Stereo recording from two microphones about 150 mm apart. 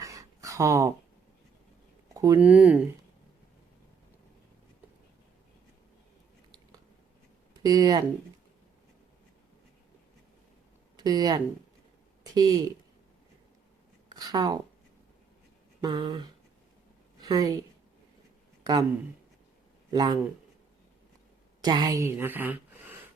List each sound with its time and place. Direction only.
0.0 s a sound: 20° right (ahead or behind)
2.1 s speech: 20° right (ahead or behind)
2.4 s speech: 5° right (ahead or behind)
7.5 s speech: 25° right (ahead or behind)
10.9 s speech: 25° right (ahead or behind)
14.1 s speech: 25° right (ahead or behind)
15.8 s a sound: 30° right (ahead or behind)
17.2 s a woman's voice: 25° right (ahead or behind)
19.9 s a man's voice: 25° right (ahead or behind)
21.6 s speech: 25° right (ahead or behind)